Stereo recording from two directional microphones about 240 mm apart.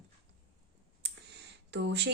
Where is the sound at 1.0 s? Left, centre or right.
Right.